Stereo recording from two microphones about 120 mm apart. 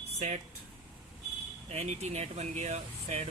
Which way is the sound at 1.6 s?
65° right (ahead or behind).